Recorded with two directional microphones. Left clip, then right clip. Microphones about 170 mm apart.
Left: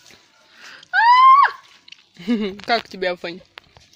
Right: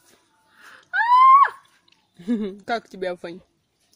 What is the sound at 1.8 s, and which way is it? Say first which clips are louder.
Speech: left 4 dB; 10° right (ahead or behind).